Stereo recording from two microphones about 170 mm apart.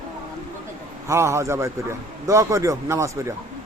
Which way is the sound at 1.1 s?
15° right (ahead or behind).